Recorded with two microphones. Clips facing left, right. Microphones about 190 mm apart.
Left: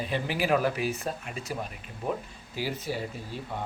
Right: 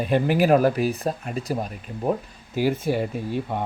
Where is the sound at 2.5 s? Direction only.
50° right (ahead or behind).